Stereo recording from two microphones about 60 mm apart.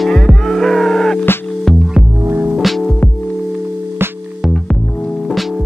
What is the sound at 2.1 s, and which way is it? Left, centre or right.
Music, right.